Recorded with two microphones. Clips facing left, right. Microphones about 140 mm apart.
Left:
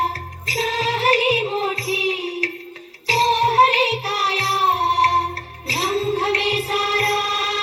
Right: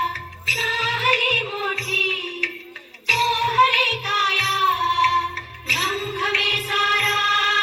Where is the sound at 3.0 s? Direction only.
35° left (ahead or behind).